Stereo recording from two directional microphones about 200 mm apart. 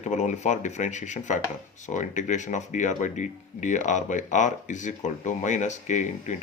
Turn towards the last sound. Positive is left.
turn(degrees=35)  # may be behind; listen again after turning